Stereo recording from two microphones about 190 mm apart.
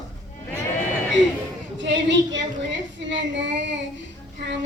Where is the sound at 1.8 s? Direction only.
70° right (ahead or behind).